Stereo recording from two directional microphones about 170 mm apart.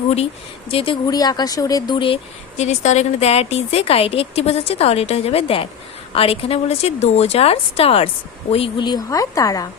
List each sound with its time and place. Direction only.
0.7 s a woman's voice: 30° left (ahead or behind)
1.0 s a woman's voice: 20° left (ahead or behind)
2.6 s a woman's voice: 40° left (ahead or behind); by 9.6 s 20° left (ahead or behind)